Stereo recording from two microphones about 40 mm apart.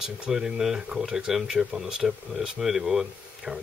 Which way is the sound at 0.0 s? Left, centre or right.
Centre.